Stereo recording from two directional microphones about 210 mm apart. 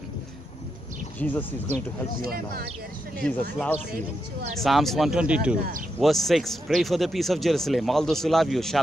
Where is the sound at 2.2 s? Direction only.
45° right (ahead or behind).